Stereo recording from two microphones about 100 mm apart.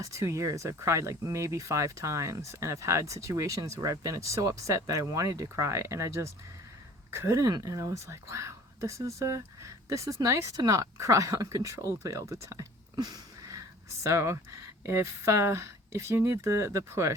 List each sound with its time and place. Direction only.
0.0 s speech: 30° right (ahead or behind)